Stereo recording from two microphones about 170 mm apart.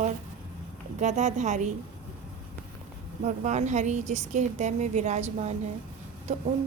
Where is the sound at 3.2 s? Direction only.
45° right (ahead or behind).